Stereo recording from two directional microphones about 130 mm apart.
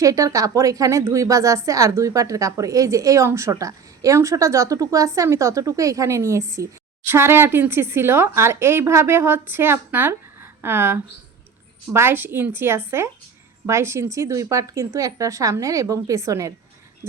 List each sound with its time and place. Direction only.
0.0 s a woman's voice: 25° right (ahead or behind)